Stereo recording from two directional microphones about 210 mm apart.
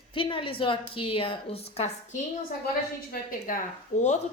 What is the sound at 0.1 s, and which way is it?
A woman's voice, 25° left (ahead or behind).